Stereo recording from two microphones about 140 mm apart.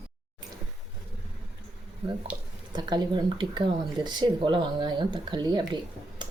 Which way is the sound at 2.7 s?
30° right (ahead or behind).